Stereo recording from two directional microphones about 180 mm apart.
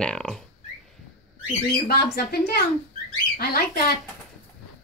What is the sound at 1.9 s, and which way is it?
Speech, 60° left (ahead or behind).